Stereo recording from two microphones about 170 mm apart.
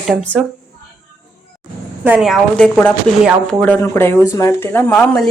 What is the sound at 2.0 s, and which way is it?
Speech, 10° right (ahead or behind).